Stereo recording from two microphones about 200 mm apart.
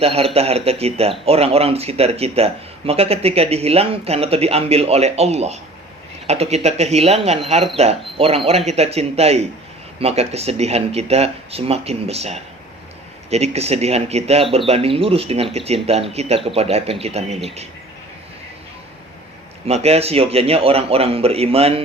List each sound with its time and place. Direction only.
0.0 s a man's voice: 30° right (ahead or behind)
19.6 s a man's voice: 30° right (ahead or behind)